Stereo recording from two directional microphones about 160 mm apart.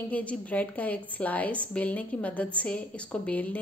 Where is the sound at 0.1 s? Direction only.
10° left (ahead or behind).